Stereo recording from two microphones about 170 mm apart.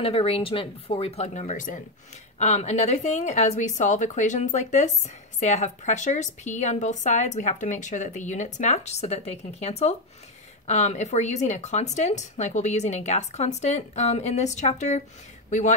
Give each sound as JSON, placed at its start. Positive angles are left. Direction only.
{"t": 0.0, "sound": "speech", "side_deg": 35}